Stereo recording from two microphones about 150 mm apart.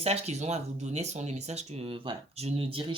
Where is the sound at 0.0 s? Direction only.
45° right (ahead or behind).